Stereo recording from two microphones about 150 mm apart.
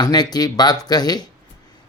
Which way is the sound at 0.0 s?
25° left (ahead or behind).